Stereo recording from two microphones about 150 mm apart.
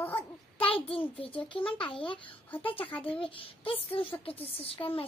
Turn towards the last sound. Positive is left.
turn(degrees=40)  # may be behind; listen again after turning